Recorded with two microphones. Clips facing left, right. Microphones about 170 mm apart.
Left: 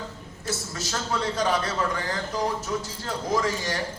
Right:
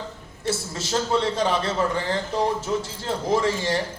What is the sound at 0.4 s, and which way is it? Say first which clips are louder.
A man's voice: right 4 dB; 30° right (ahead or behind).